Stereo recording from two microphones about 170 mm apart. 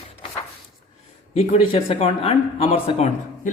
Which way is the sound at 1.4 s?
35° left (ahead or behind).